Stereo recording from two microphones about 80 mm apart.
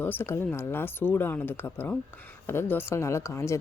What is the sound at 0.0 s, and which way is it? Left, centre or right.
Speech, left.